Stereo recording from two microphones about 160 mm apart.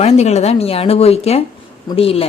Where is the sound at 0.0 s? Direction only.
40° left (ahead or behind).